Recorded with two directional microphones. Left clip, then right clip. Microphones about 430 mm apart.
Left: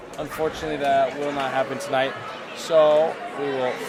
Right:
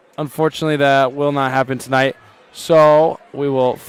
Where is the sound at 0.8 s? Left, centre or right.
Right.